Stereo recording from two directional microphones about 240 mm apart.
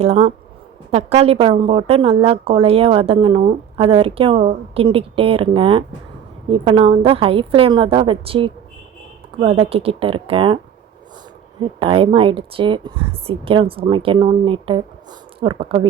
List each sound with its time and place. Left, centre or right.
0.0 s a woman's voice: right
11.8 s a woman's voice: right